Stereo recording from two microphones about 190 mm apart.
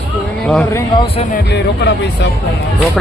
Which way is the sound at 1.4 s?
65° left (ahead or behind).